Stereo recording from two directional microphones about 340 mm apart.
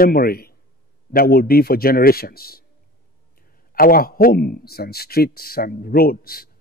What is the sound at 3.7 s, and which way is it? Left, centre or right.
Speech, left.